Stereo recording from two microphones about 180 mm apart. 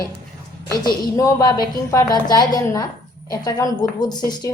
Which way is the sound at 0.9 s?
20° left (ahead or behind).